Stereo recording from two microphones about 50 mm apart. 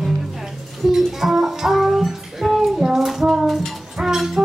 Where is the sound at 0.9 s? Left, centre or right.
Centre.